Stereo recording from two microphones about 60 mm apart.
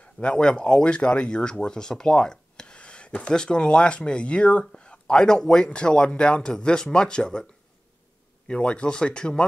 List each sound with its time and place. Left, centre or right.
0.0 s speech: centre
8.5 s speech: centre